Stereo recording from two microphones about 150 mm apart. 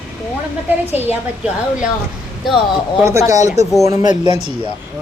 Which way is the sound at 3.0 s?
20° right (ahead or behind).